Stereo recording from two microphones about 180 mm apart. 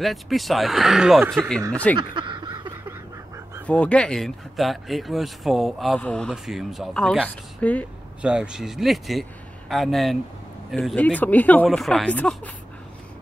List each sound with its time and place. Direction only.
0.0 s speech: centre (ahead or behind)
2.0 s a sound: 25° right (ahead or behind)
3.6 s speech: 5° left (ahead or behind)
8.2 s speech: 5° right (ahead or behind)